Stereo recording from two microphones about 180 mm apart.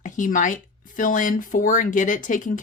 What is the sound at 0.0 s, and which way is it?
Speech, 45° left (ahead or behind).